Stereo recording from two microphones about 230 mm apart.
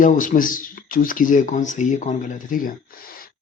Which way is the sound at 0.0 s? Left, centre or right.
Left.